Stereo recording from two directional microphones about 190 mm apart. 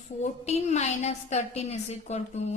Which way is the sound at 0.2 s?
35° left (ahead or behind).